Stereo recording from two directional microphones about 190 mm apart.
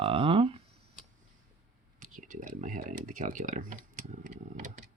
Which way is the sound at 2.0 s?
45° right (ahead or behind).